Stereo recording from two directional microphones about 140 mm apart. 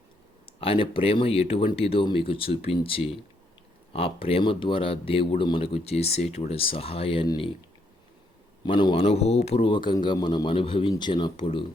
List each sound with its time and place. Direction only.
0.6 s speech: 40° left (ahead or behind)
8.6 s speech: 35° left (ahead or behind)
9.7 s speech: 35° left (ahead or behind)